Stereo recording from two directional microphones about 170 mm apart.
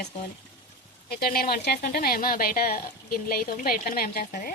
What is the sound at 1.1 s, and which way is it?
Speech, 60° left (ahead or behind).